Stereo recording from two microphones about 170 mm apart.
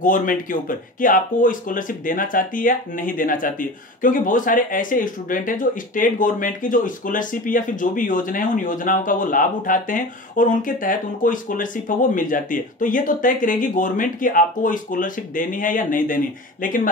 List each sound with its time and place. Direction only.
0.0 s speech: 50° left (ahead or behind)